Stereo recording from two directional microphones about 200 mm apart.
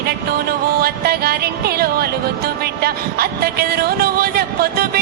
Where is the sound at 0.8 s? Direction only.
50° right (ahead or behind).